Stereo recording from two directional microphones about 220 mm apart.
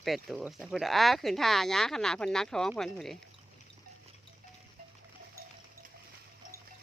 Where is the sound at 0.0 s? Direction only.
Centre (ahead or behind).